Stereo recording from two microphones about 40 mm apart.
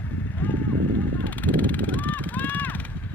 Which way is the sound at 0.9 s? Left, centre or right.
Left.